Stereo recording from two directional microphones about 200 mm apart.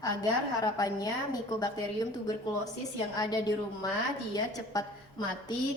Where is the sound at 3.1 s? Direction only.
20° left (ahead or behind).